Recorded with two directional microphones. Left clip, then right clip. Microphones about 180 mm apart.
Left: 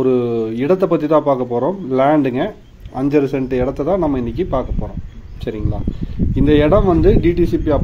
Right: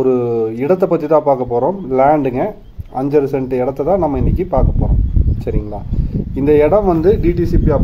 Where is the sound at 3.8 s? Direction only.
20° left (ahead or behind).